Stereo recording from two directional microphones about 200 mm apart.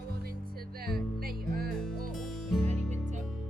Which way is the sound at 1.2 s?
50° right (ahead or behind).